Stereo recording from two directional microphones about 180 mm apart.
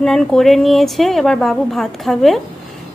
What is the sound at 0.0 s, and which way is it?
A woman's voice, centre (ahead or behind).